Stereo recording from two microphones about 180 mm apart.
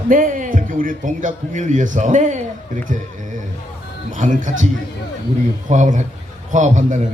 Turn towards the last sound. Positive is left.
turn(degrees=-45)  # may be behind; listen again after turning